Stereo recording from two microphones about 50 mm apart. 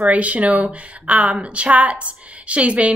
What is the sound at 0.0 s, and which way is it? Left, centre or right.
A woman's voice, right.